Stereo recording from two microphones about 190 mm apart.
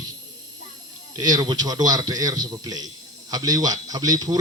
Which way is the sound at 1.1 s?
20° right (ahead or behind).